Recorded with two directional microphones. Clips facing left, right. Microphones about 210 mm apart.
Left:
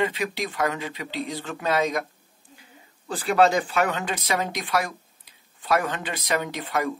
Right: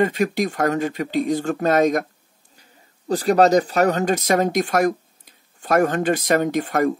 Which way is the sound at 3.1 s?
40° right (ahead or behind).